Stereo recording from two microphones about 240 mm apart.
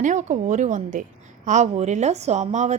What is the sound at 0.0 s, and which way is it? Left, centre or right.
A woman's voice, right.